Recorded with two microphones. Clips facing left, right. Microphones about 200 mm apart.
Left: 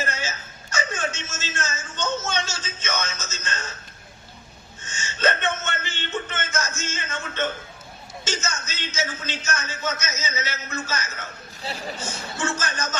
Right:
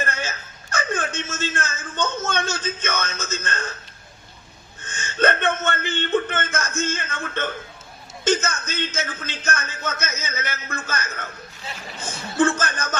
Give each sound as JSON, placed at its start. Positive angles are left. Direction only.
{"t": 0.0, "sound": "a sound", "side_deg": -55}
{"t": 4.8, "sound": "a man's voice", "side_deg": -55}
{"t": 11.6, "sound": "speech", "side_deg": 35}
{"t": 12.1, "sound": "a man's voice", "side_deg": -55}